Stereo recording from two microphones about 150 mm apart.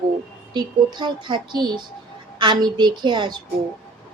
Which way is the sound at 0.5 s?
30° right (ahead or behind).